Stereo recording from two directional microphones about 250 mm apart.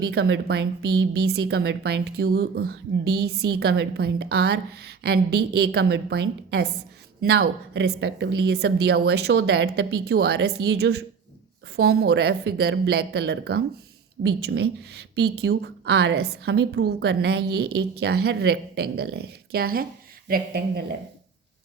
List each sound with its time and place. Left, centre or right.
0.0 s a woman's voice: right